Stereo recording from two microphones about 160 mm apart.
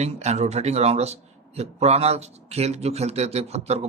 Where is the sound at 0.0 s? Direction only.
45° right (ahead or behind).